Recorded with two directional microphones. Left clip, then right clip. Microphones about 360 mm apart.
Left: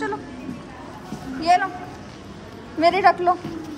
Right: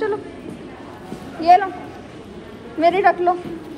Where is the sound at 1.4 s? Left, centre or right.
Centre.